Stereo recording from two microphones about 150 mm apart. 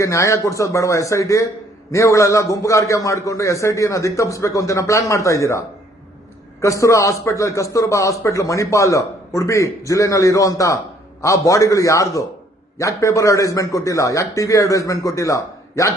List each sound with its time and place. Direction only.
0.0 s a man's voice: 20° left (ahead or behind)